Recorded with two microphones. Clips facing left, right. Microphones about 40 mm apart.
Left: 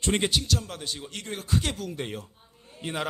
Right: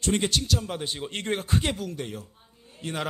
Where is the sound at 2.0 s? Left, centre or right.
Left.